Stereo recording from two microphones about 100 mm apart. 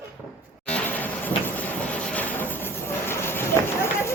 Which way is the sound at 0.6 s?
15° left (ahead or behind).